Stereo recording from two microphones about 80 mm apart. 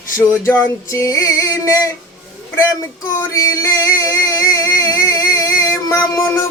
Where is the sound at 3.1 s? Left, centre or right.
Left.